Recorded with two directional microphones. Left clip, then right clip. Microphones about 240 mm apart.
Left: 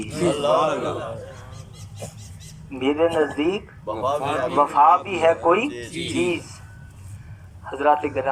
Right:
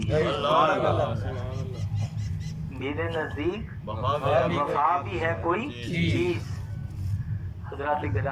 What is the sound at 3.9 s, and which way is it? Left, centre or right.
Speech, left.